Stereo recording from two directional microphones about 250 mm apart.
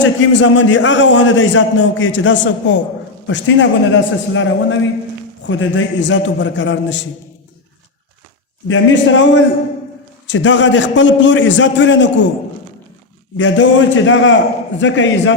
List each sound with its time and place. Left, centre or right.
0.0 s a man's voice: left
8.6 s a man's voice: left
13.3 s a man's voice: left